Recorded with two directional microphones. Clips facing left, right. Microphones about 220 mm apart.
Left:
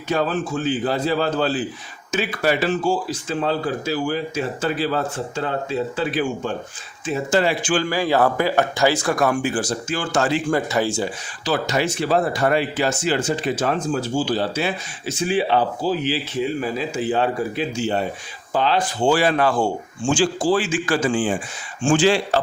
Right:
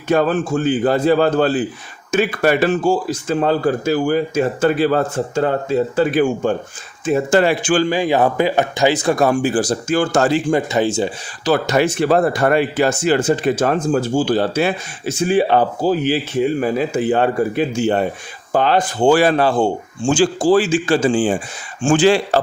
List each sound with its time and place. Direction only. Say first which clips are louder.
0.1 s speech: right 6 dB; 50° right (ahead or behind)
7.9 s speech: right 3 dB; 20° right (ahead or behind); by 10.4 s 40° right (ahead or behind)
10.5 s speech: right 4 dB; 20° right (ahead or behind)
11.4 s speech: right 6 dB; 55° right (ahead or behind)
19.4 s speech: right 4 dB; 25° right (ahead or behind)
20.1 s a man's voice: right 5 dB; 45° right (ahead or behind)
21.8 s speech: right 4 dB; 50° right (ahead or behind)